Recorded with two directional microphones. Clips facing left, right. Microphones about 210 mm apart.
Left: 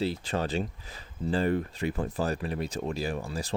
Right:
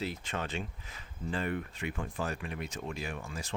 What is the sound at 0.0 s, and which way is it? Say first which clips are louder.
Speech: left 7 dB; 35° left (ahead or behind).